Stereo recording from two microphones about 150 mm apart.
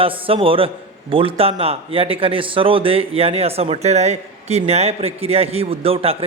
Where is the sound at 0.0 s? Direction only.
40° right (ahead or behind).